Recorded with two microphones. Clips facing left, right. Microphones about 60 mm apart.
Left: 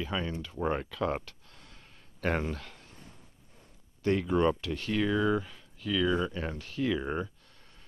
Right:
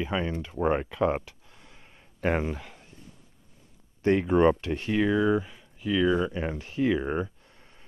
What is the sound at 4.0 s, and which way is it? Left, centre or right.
Speech, right.